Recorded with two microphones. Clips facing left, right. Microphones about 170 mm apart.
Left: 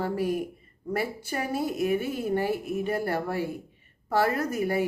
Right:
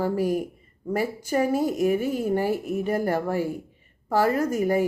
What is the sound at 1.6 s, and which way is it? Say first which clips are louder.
A woman's voice: right 4 dB; 10° right (ahead or behind).